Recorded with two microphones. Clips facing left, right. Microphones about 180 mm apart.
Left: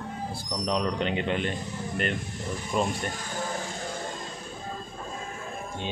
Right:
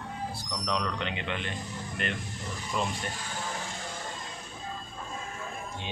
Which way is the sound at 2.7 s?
50° left (ahead or behind).